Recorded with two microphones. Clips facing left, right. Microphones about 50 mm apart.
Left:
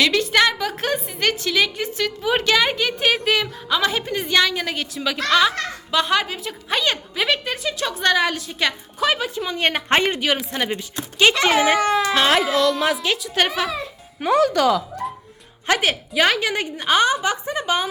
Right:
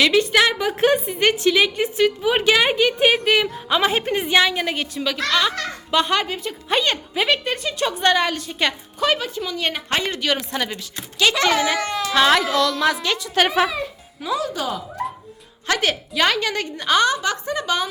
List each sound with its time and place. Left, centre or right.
0.0 s a woman's voice: centre
3.7 s a woman's voice: right
3.9 s a woman's voice: right
4.2 s a woman's voice: centre
9.6 s speech: left
10.1 s speech: centre
12.1 s a woman's voice: centre
14.2 s speech: left
15.8 s a woman's voice: centre